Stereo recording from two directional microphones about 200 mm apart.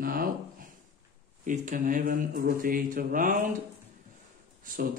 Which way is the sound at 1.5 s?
40° right (ahead or behind).